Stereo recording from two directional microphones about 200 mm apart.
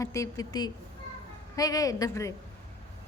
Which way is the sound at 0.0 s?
15° left (ahead or behind).